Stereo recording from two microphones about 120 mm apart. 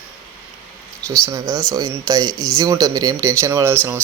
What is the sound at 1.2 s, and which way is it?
Speech, 30° right (ahead or behind).